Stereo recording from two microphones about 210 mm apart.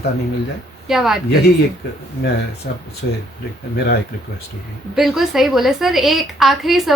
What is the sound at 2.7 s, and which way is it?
Speech, 50° left (ahead or behind).